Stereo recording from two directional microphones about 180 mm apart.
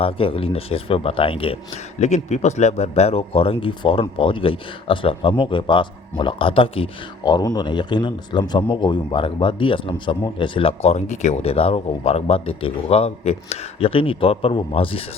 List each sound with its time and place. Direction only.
0.0 s a man's voice: 30° left (ahead or behind)